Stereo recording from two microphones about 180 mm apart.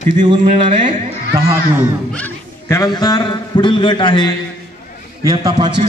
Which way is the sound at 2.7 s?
20° left (ahead or behind).